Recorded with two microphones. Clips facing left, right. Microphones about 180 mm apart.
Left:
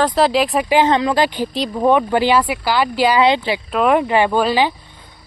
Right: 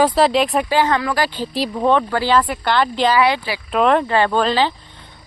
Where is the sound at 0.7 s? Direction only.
20° left (ahead or behind).